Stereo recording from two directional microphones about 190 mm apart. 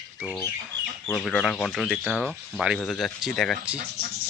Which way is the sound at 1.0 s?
5° left (ahead or behind).